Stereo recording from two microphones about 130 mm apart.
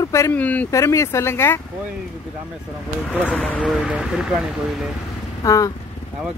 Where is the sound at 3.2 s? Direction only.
5° left (ahead or behind).